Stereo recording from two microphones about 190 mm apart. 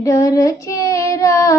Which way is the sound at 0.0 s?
15° left (ahead or behind).